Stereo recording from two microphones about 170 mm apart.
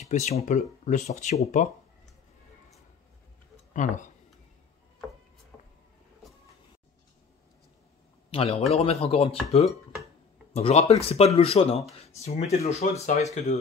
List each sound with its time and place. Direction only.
0.0 s speech: 40° left (ahead or behind)
3.7 s speech: 45° left (ahead or behind)
5.5 s vehicle: 5° left (ahead or behind)
8.3 s a man's voice: 35° left (ahead or behind)